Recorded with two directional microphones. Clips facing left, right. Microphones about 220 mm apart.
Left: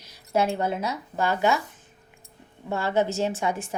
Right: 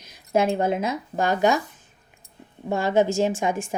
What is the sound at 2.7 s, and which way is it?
Speech, 15° right (ahead or behind).